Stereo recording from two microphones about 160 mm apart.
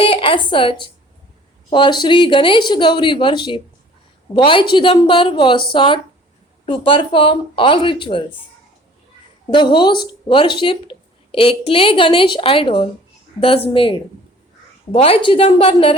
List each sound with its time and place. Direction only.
0.0 s speech: 35° left (ahead or behind)
9.5 s speech: 30° left (ahead or behind)